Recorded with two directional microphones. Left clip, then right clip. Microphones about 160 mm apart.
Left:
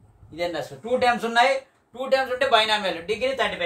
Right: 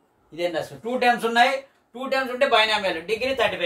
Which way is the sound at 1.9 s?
25° left (ahead or behind).